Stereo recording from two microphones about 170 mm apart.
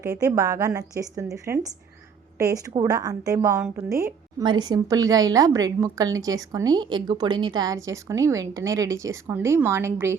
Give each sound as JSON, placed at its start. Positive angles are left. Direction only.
{"t": 0.0, "sound": "a woman's voice", "side_deg": -20}